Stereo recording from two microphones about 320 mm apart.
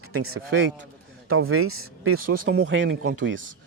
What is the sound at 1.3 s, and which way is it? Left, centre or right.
Speech, right.